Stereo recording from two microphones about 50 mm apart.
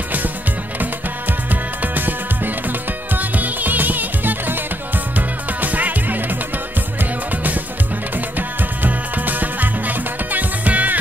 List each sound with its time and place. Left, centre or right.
1.5 s music: right